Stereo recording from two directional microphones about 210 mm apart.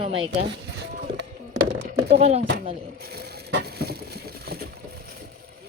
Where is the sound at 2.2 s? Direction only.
30° right (ahead or behind).